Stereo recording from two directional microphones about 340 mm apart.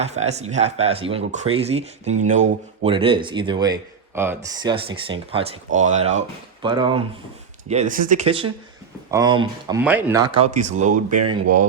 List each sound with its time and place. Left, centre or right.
0.0 s speech: centre